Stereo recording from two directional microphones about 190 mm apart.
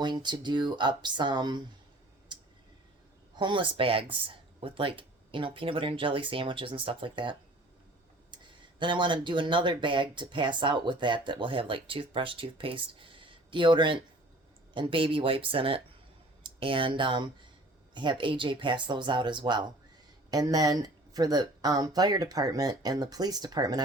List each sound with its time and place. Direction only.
0.0 s speech: 25° right (ahead or behind)
2.3 s a sound: 25° right (ahead or behind)
3.3 s speech: 25° right (ahead or behind)
8.8 s speech: 25° right (ahead or behind)